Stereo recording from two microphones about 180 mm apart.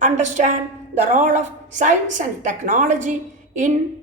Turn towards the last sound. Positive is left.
turn(degrees=-45)  # may be behind; listen again after turning